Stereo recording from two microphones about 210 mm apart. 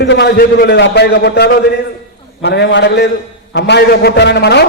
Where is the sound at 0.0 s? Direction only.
55° left (ahead or behind).